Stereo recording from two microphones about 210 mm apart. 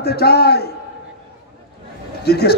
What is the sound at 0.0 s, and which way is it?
Speech, 50° left (ahead or behind).